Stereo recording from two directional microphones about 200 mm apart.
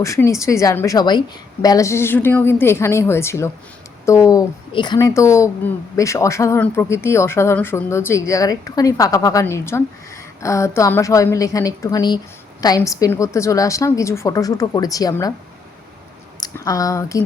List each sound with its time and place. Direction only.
0.0 s speech: 15° left (ahead or behind)
16.4 s speech: 15° left (ahead or behind)